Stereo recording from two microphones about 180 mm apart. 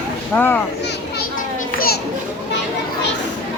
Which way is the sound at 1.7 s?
55° left (ahead or behind).